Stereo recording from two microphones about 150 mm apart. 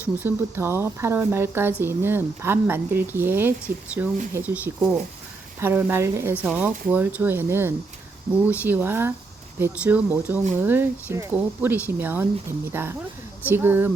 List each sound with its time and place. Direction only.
0.0 s speech: 15° right (ahead or behind)